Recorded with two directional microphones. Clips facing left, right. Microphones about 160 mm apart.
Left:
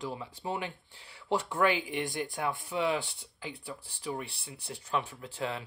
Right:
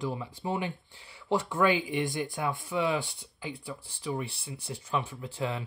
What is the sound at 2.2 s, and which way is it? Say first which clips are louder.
Speech: right 1 dB; 10° left (ahead or behind).